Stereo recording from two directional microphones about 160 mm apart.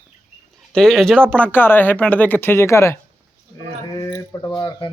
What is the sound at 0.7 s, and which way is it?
Speech, 5° left (ahead or behind).